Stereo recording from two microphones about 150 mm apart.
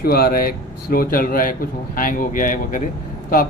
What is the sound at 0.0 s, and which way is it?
Speech, 90° left.